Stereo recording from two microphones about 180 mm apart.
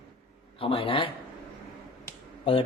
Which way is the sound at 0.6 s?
30° left (ahead or behind).